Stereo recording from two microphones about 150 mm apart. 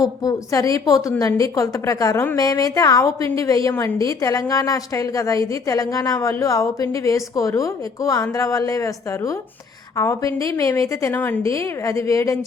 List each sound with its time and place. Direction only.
0.0 s a woman's voice: 25° left (ahead or behind)